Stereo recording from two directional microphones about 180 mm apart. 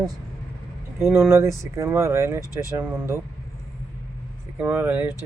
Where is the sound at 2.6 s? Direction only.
15° right (ahead or behind).